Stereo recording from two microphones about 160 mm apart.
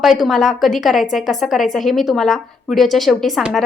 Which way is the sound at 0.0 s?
Centre (ahead or behind).